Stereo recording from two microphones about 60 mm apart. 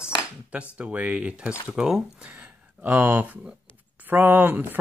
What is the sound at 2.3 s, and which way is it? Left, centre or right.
Speech, right.